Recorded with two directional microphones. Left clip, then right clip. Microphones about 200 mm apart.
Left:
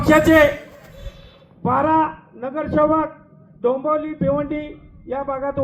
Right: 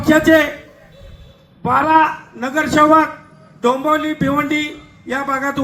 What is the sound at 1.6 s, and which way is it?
A man's voice, 60° right (ahead or behind).